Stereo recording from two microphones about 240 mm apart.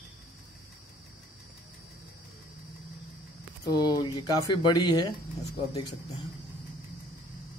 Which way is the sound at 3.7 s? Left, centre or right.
Centre.